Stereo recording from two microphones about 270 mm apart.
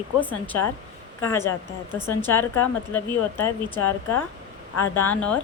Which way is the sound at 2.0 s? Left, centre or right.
Centre.